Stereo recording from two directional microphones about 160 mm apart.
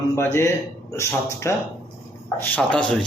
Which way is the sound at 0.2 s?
15° left (ahead or behind).